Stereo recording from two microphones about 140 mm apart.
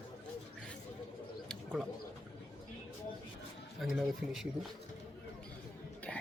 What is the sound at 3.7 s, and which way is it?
Speech, centre (ahead or behind).